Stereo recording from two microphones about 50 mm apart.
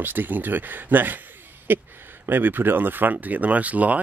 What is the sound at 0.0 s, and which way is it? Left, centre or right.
Speech, right.